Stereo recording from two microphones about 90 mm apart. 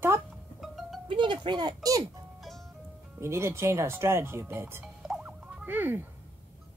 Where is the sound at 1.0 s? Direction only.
65° right (ahead or behind); by 2.0 s 45° right (ahead or behind).